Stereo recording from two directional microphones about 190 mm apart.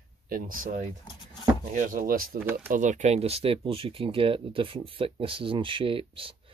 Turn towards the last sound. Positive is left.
turn(degrees=-30)  # may be behind; listen again after turning